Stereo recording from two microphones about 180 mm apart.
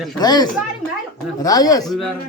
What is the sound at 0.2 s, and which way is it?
Speech, 20° left (ahead or behind).